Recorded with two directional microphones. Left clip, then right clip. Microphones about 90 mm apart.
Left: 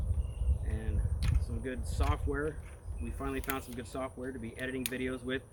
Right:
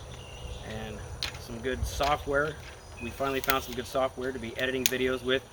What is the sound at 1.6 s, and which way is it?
Speech, 35° right (ahead or behind).